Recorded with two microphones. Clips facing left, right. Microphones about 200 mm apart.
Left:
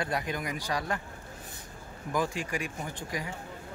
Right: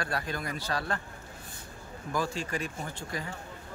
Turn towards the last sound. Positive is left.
turn(degrees=15)  # may be behind; listen again after turning